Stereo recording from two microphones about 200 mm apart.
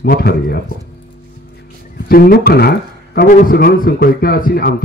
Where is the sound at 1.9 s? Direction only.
50° left (ahead or behind).